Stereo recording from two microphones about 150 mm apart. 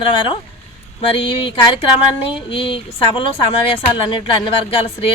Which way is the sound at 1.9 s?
40° left (ahead or behind).